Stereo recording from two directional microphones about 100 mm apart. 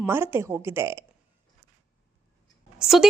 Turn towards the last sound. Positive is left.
turn(degrees=-5)  # may be behind; listen again after turning